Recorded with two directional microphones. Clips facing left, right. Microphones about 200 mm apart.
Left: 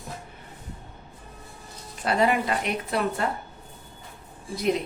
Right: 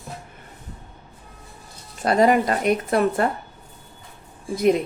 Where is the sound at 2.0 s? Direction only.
40° right (ahead or behind).